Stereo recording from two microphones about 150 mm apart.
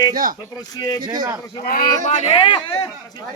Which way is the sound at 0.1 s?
70° right (ahead or behind).